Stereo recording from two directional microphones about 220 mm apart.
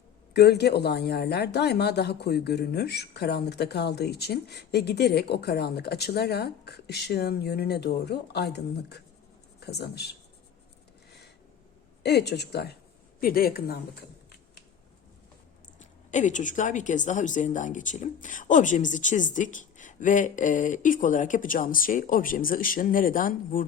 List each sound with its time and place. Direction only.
0.3 s speech: 50° left (ahead or behind)
12.0 s speech: 50° left (ahead or behind)
15.8 s a woman's voice: 35° left (ahead or behind)